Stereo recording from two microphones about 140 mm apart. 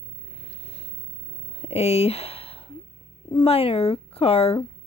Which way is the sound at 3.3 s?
45° left (ahead or behind).